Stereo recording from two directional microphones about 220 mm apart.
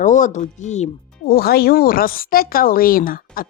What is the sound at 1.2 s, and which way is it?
Speech, 45° left (ahead or behind).